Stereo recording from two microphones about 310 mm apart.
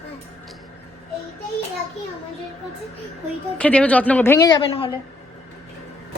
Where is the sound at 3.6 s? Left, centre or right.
Centre.